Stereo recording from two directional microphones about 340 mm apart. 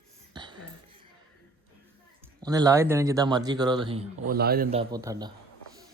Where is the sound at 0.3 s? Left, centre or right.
Centre.